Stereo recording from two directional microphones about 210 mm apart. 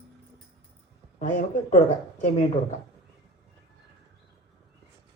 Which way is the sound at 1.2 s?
35° left (ahead or behind).